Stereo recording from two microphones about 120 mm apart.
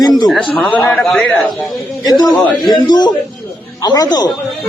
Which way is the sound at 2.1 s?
35° left (ahead or behind).